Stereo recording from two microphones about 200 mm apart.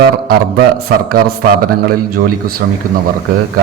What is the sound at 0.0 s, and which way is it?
A man's voice, 50° right (ahead or behind).